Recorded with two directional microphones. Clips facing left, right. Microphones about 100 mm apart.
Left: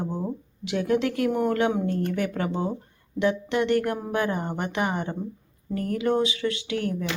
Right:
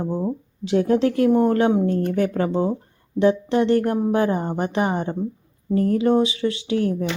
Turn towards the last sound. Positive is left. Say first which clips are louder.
# right 6 dB
turn(degrees=-30)  # may be behind; listen again after turning